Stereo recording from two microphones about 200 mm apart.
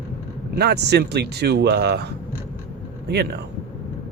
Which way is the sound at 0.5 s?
55° right (ahead or behind).